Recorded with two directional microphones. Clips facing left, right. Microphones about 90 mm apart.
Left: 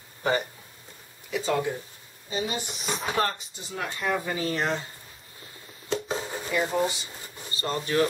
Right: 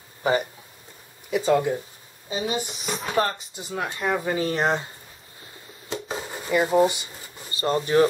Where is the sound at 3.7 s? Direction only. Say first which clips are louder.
Right 3 dB; 30° right (ahead or behind).